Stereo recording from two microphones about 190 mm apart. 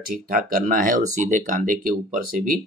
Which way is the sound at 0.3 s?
50° right (ahead or behind).